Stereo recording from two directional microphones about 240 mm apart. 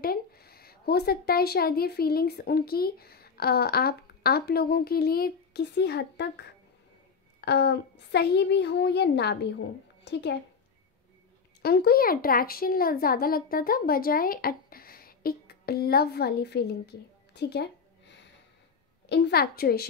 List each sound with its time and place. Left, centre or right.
0.0 s a woman's voice: left
7.3 s a woman's voice: left
11.6 s speech: left
19.0 s speech: left